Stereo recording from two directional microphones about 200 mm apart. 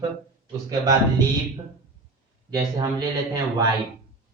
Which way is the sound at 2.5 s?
20° right (ahead or behind).